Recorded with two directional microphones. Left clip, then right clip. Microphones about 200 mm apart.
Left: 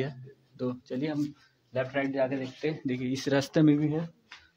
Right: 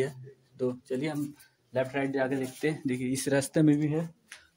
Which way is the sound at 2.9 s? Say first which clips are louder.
Even; 10° right (ahead or behind).